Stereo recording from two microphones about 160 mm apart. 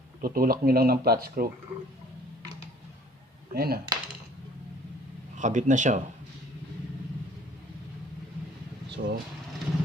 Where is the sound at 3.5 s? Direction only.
70° right (ahead or behind).